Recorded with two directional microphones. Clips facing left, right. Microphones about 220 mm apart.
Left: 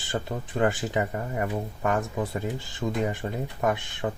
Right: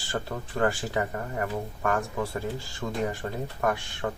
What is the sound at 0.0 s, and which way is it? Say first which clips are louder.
Speech: left 2 dB; 15° left (ahead or behind).